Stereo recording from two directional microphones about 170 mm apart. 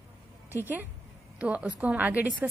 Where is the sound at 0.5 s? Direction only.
10° right (ahead or behind).